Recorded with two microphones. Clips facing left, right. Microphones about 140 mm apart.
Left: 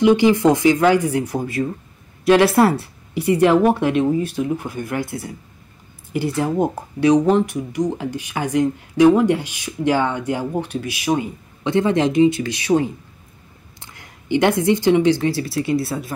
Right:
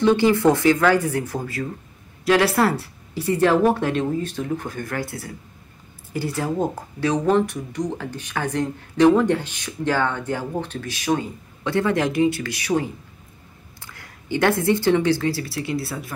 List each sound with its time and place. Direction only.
0.0 s speech: 15° left (ahead or behind)